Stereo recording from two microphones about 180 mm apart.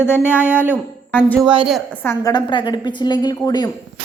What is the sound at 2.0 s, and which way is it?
A woman's voice, 15° left (ahead or behind).